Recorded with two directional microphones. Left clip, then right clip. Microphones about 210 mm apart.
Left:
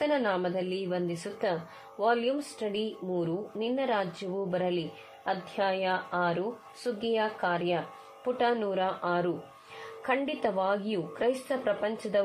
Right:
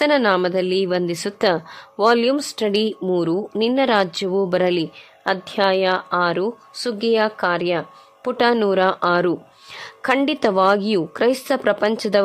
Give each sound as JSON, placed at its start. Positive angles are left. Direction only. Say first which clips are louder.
{"t": 0.0, "sound": "a woman's voice", "louder": "right 11 dB", "side_deg": -55}